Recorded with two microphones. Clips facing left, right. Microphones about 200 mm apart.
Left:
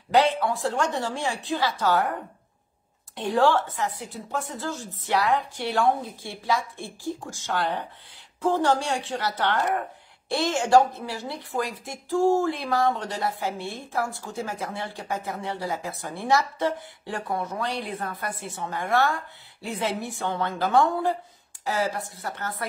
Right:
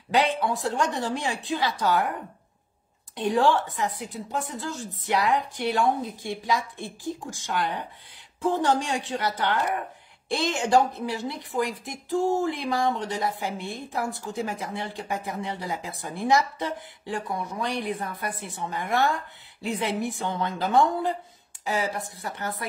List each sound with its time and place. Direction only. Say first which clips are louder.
0.1 s a woman's voice: left 2 dB; 20° right (ahead or behind)
3.2 s a woman's voice: even; 15° right (ahead or behind)